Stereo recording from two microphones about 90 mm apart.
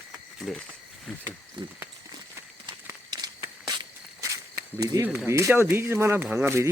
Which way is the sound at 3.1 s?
50° right (ahead or behind).